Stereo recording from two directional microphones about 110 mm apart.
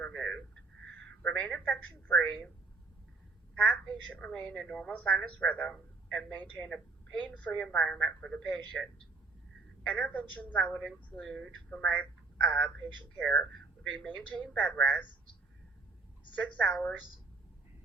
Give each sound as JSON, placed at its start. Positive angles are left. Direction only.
{"t": 0.0, "sound": "a sound", "side_deg": 10}
{"t": 1.2, "sound": "a woman's voice", "side_deg": 10}
{"t": 3.5, "sound": "a woman's voice", "side_deg": 10}
{"t": 16.4, "sound": "a woman's voice", "side_deg": 10}